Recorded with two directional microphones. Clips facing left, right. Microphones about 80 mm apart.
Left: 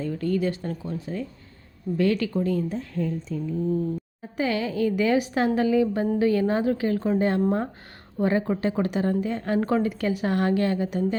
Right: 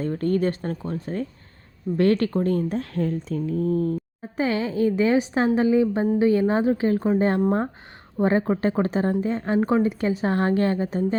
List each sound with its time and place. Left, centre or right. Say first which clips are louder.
0.0 s speech: right 3 dB; right
4.4 s a woman's voice: right 2 dB; right
8.2 s a woman's voice: right 3 dB; right
9.6 s a woman's voice: right 3 dB; centre
9.8 s a woman's voice: right 2 dB; right